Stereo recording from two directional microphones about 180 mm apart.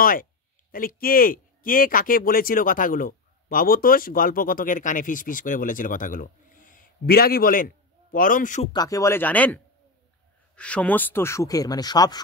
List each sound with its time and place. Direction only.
0.0 s speech: 50° left (ahead or behind)
8.7 s speech: 20° left (ahead or behind)